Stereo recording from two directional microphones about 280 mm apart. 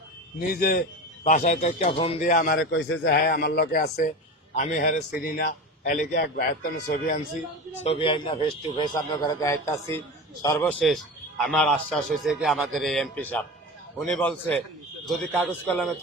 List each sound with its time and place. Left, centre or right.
0.3 s a man's voice: left
7.9 s a man's voice: centre